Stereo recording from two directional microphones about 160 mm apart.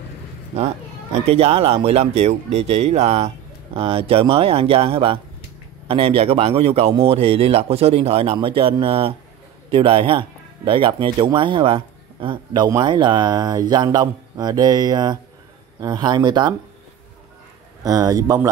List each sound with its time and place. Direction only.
0.5 s speech: 40° right (ahead or behind)
17.8 s speech: 25° right (ahead or behind)